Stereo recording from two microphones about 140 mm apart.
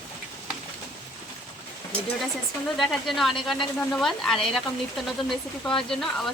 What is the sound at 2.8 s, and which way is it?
Speech, centre (ahead or behind).